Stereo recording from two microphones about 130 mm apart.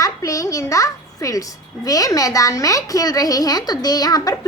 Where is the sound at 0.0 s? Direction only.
25° left (ahead or behind).